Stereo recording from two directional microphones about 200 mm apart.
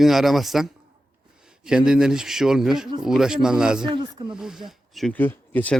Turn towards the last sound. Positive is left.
turn(degrees=10)  # may be behind; listen again after turning